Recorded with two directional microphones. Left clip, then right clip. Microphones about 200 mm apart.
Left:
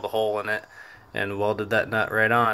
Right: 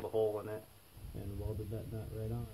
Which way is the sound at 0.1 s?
50° left (ahead or behind).